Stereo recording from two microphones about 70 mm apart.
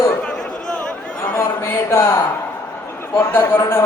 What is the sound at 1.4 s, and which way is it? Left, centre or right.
A man's voice, left.